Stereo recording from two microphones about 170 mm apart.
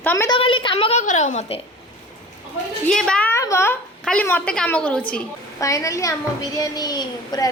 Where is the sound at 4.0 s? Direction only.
5° left (ahead or behind).